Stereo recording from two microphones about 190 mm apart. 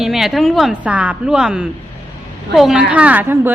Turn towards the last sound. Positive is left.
turn(degrees=-10)  # may be behind; listen again after turning